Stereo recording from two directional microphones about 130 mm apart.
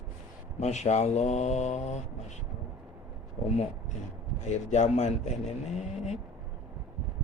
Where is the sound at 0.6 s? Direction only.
60° left (ahead or behind).